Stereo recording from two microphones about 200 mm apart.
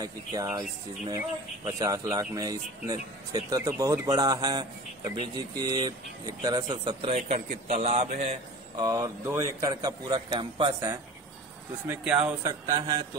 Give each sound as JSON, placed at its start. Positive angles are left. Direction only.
{"t": 0.0, "sound": "speech", "side_deg": -20}
{"t": 8.7, "sound": "speech", "side_deg": -20}
{"t": 11.9, "sound": "speech", "side_deg": -5}
{"t": 12.6, "sound": "speech", "side_deg": -20}